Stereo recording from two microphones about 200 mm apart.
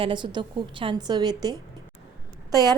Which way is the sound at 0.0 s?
25° right (ahead or behind).